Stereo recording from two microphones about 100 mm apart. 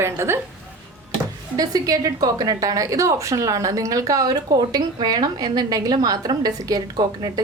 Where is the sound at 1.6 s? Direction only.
35° right (ahead or behind).